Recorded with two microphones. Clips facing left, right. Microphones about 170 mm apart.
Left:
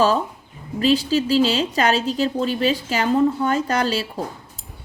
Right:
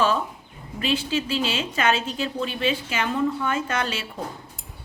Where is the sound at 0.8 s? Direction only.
35° left (ahead or behind).